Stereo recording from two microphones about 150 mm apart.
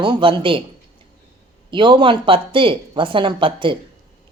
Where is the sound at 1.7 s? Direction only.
30° right (ahead or behind).